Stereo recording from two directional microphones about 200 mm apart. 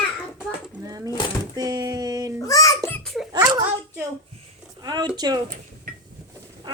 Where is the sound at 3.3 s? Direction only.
20° right (ahead or behind).